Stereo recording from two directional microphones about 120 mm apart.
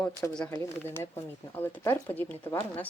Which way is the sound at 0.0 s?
5° left (ahead or behind).